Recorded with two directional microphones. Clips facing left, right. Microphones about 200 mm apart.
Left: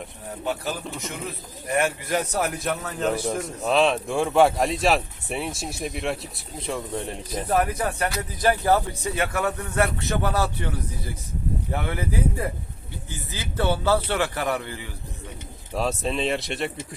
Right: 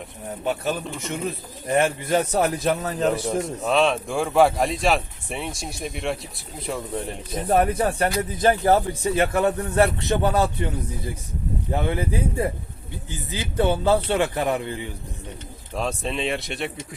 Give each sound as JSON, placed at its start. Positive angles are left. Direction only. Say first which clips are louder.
{"t": 0.4, "sound": "speech", "louder": "right 3 dB", "side_deg": -20}
{"t": 3.1, "sound": "speech", "louder": "even", "side_deg": 0}
{"t": 7.5, "sound": "speech", "louder": "right 4 dB", "side_deg": -30}
{"t": 8.1, "sound": "speech", "louder": "right 3 dB", "side_deg": -20}
{"t": 15.7, "sound": "speech", "louder": "left 1 dB", "side_deg": 0}